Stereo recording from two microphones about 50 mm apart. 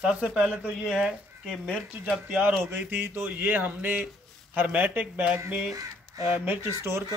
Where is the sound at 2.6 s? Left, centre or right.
Right.